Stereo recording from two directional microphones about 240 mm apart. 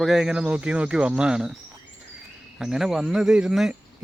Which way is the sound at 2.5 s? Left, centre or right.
Centre.